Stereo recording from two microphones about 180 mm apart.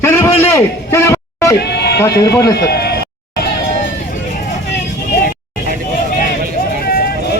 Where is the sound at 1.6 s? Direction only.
65° left (ahead or behind).